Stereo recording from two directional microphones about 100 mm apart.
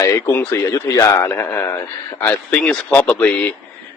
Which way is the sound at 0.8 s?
35° left (ahead or behind).